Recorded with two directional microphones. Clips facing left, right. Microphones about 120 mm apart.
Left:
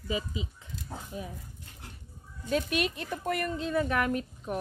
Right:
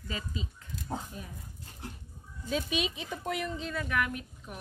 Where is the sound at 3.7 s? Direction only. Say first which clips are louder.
Left 6 dB; 30° left (ahead or behind).